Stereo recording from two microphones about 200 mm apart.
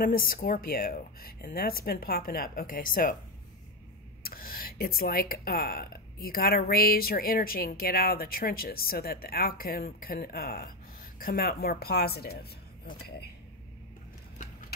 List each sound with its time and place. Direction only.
0.0 s speech: 45° left (ahead or behind)
4.2 s speech: 45° left (ahead or behind)